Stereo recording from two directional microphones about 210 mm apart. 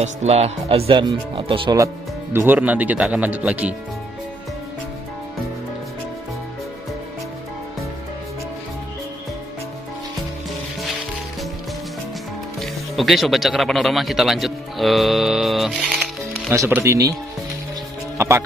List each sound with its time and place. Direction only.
0.0 s speech: 30° right (ahead or behind)
2.3 s speech: 10° right (ahead or behind)
12.5 s speech: centre (ahead or behind)
16.5 s speech: 10° right (ahead or behind)
18.1 s music: 10° right (ahead or behind)